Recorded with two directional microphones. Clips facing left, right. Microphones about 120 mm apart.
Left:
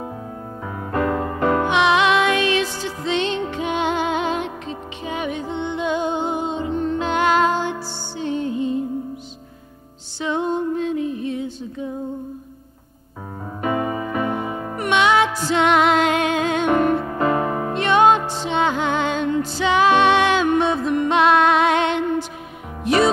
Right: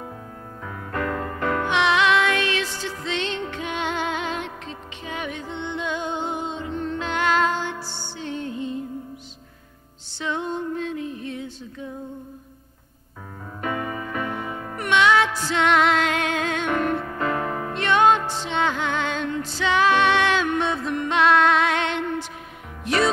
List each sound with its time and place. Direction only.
0.9 s music: 20° left (ahead or behind)
10.3 s music: 15° left (ahead or behind)
13.6 s music: 20° left (ahead or behind)